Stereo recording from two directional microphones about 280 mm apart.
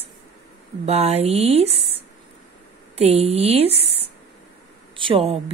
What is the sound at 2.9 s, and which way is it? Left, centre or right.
Speech, right.